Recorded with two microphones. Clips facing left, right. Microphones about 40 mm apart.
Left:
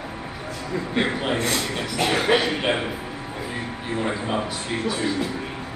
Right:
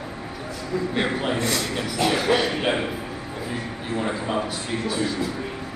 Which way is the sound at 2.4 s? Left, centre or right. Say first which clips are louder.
Even; centre.